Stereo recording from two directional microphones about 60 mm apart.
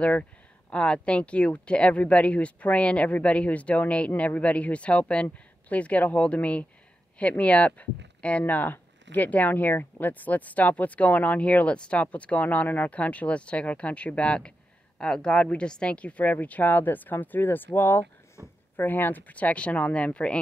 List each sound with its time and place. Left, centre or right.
0.0 s speech: left
18.8 s speech: left